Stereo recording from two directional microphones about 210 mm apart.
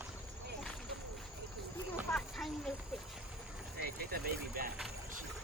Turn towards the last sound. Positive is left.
turn(degrees=-45)  # may be behind; listen again after turning